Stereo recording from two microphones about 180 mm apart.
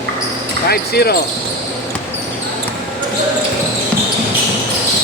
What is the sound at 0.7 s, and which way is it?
Speech, 60° left (ahead or behind).